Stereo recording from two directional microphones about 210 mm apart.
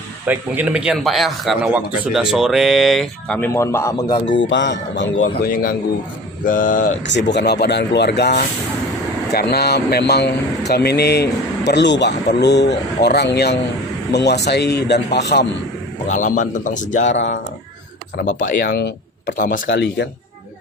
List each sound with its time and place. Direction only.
0.3 s a man's voice: 5° right (ahead or behind); by 4.2 s 15° left (ahead or behind)
4.3 s speech: 60° left (ahead or behind)
6.4 s speech: 40° left (ahead or behind)
7.1 s speech: 55° left (ahead or behind)
16.0 s speech: 35° left (ahead or behind)
17.1 s speech: 60° left (ahead or behind)
18.4 s speech: 50° left (ahead or behind)
19.6 s speech: 55° left (ahead or behind)